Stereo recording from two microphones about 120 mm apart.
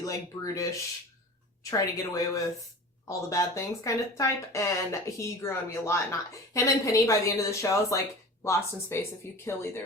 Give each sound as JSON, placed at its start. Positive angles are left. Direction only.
{"t": 0.0, "sound": "a woman's voice", "side_deg": 30}